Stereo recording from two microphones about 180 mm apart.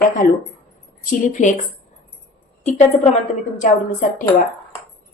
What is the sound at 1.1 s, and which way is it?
Speech, 45° left (ahead or behind).